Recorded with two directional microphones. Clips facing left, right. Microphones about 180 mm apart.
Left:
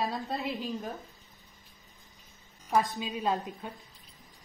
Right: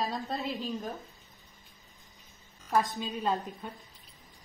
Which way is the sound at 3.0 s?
5° left (ahead or behind).